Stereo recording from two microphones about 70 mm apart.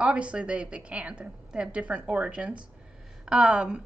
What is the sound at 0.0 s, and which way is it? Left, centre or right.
A woman's voice, centre.